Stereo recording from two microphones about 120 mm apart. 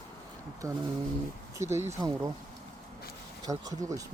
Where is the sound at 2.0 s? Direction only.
35° right (ahead or behind).